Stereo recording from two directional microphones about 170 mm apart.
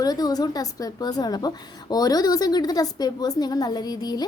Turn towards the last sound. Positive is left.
turn(degrees=25)  # may be behind; listen again after turning